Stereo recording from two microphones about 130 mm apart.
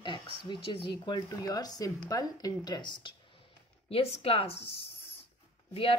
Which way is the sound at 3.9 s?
50° left (ahead or behind).